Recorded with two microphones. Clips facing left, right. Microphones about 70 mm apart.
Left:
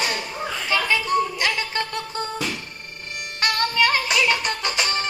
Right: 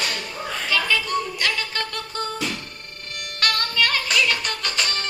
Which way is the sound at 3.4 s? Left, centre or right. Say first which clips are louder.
Left 2 dB; centre.